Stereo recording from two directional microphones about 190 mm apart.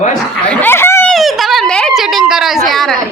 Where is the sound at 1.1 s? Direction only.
Centre (ahead or behind).